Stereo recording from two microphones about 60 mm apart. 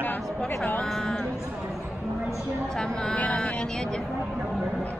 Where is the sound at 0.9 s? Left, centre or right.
Centre.